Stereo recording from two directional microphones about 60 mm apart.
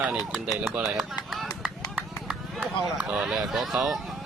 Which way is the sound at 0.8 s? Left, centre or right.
Centre.